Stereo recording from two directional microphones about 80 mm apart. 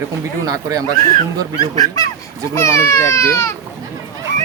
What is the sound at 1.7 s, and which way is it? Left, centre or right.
Speech, left.